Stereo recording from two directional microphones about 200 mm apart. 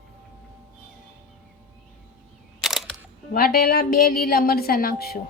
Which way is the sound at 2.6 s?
Centre (ahead or behind).